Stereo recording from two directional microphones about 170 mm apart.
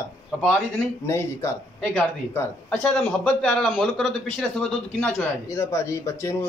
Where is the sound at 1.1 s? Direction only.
15° left (ahead or behind).